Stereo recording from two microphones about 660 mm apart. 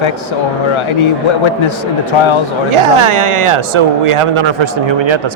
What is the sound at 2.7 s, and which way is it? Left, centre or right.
Speech, right.